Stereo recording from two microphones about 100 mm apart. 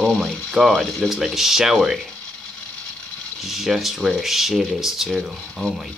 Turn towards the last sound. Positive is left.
turn(degrees=0)  # may be behind; listen again after turning